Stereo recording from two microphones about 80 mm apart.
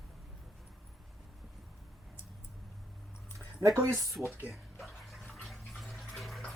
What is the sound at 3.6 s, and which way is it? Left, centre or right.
Speech, right.